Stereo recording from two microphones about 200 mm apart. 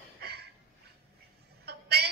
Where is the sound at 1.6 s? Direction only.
55° right (ahead or behind).